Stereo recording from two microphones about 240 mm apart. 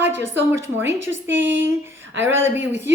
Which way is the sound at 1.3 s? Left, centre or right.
Centre.